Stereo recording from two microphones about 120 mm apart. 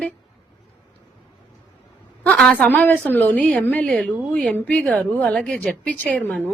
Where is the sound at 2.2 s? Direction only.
10° left (ahead or behind).